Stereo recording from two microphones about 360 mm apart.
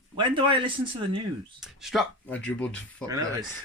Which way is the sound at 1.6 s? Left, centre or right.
Centre.